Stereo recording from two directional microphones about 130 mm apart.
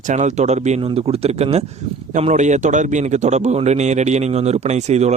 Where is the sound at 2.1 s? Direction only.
65° right (ahead or behind).